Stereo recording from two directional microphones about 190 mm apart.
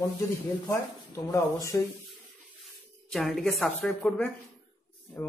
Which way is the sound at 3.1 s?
Centre (ahead or behind).